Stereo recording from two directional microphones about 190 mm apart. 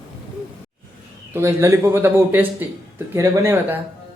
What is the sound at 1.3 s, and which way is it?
Speech, 15° right (ahead or behind).